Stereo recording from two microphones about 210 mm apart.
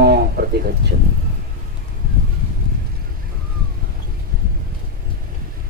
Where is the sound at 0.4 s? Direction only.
50° right (ahead or behind).